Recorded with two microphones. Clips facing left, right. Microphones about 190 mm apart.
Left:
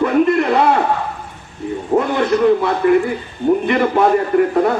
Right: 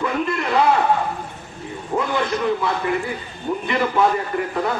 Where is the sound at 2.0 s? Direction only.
55° left (ahead or behind).